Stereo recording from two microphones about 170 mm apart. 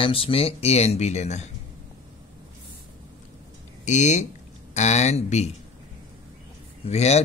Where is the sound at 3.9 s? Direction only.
45° left (ahead or behind).